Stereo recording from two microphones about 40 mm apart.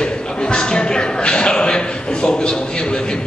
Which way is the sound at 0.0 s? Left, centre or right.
Left.